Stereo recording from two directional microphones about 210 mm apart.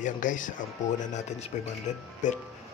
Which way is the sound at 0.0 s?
40° left (ahead or behind).